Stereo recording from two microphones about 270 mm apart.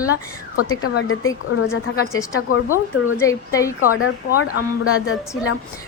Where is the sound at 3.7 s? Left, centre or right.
Left.